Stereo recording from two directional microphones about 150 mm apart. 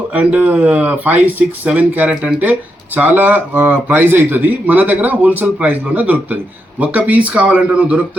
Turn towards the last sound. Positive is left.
turn(degrees=-10)  # may be behind; listen again after turning